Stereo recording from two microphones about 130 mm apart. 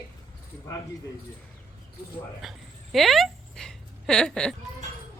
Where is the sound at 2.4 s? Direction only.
Centre (ahead or behind).